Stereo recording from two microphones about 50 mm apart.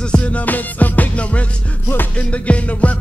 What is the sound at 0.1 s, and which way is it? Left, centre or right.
Music, left.